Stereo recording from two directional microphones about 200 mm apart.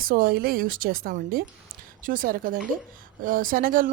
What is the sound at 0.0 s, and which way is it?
Speech, 45° right (ahead or behind).